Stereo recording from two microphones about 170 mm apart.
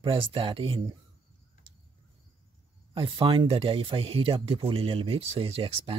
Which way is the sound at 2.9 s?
30° right (ahead or behind).